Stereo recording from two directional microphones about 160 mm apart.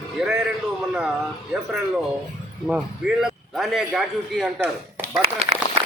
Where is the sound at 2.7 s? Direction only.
5° right (ahead or behind).